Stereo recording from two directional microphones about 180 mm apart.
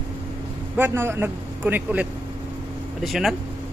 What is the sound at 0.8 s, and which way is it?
A man's voice, 10° right (ahead or behind).